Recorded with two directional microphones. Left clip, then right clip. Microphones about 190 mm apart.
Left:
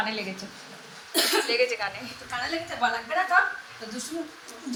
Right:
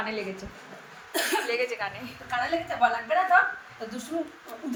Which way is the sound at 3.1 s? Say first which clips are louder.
Right 1 dB; 50° right (ahead or behind).